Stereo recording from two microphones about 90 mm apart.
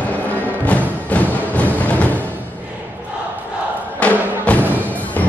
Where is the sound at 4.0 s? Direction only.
15° left (ahead or behind).